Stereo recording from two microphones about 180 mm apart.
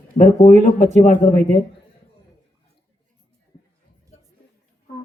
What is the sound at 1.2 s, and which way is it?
Speech, 40° left (ahead or behind).